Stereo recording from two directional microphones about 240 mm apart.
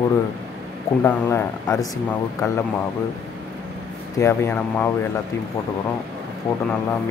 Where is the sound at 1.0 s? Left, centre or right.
Centre.